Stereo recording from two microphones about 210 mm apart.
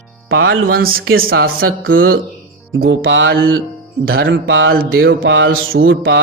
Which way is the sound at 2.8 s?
60° right (ahead or behind).